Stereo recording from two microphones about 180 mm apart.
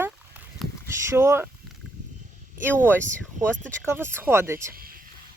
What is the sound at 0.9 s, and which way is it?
Speech, 15° right (ahead or behind).